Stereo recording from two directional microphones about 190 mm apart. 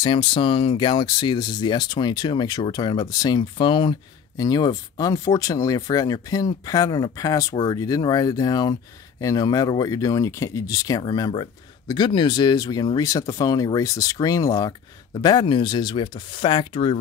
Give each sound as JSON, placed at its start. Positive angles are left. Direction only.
{"t": 0.0, "sound": "speech", "side_deg": 25}